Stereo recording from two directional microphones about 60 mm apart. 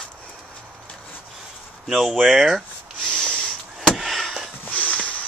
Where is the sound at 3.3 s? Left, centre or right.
Centre.